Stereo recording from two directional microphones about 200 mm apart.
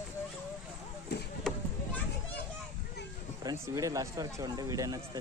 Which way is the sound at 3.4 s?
15° right (ahead or behind).